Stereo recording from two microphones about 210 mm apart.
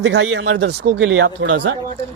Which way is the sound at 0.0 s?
60° right (ahead or behind).